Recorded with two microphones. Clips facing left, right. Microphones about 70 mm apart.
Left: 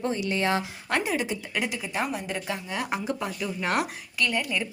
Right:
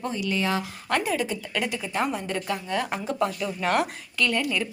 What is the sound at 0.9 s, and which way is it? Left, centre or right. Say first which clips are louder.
A woman's voice: right 1 dB; centre.